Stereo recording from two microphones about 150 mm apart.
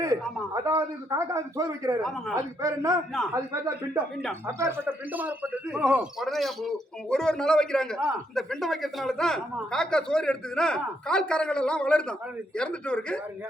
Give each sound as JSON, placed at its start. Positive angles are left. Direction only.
{"t": 0.5, "sound": "a man's voice", "side_deg": -20}